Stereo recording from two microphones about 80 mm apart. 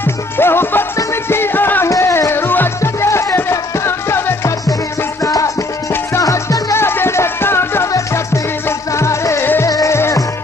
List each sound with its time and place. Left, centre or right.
0.0 s music: left
1.9 s music: left
5.2 s music: left